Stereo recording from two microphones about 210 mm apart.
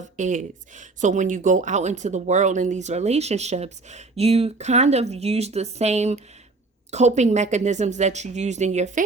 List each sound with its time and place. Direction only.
0.2 s speech: 35° right (ahead or behind)